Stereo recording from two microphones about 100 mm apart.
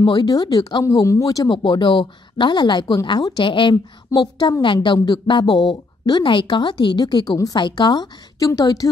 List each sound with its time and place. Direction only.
0.0 s a woman's voice: 40° left (ahead or behind)
0.8 s a woman's voice: 30° left (ahead or behind)
1.5 s a woman's voice: 50° left (ahead or behind)